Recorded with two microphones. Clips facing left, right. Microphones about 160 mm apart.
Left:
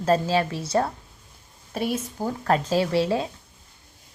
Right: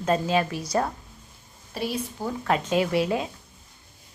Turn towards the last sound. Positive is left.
turn(degrees=30)  # may be behind; listen again after turning